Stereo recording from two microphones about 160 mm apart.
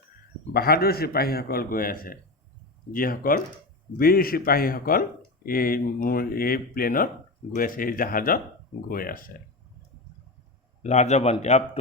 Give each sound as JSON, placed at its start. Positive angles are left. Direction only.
{"t": 0.5, "sound": "a man's voice", "side_deg": 70}
{"t": 10.8, "sound": "a man's voice", "side_deg": 45}